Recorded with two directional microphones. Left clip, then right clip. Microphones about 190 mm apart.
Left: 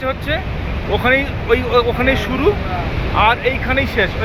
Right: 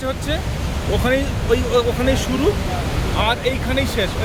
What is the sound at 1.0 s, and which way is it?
Speech, 25° right (ahead or behind).